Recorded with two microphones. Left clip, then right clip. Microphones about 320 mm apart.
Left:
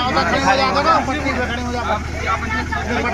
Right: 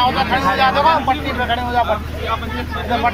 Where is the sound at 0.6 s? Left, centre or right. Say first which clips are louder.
Right 2 dB; right.